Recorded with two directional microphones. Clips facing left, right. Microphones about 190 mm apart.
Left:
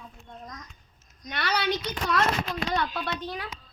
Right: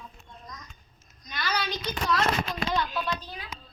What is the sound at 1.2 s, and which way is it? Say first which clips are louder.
A woman's voice: left 4 dB; 70° left (ahead or behind).